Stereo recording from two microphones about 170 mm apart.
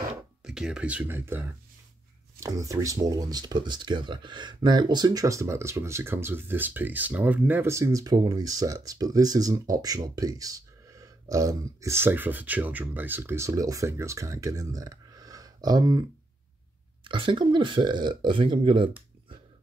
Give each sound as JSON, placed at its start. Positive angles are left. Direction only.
{"t": 0.4, "sound": "speech", "side_deg": -5}
{"t": 2.4, "sound": "speech", "side_deg": -20}